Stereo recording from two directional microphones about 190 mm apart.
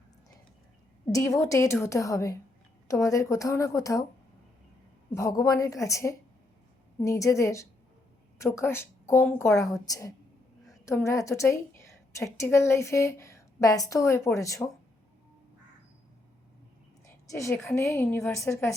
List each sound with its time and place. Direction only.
1.1 s a woman's voice: 15° left (ahead or behind)
5.1 s a woman's voice: 20° left (ahead or behind)
17.2 s a woman's voice: 15° left (ahead or behind)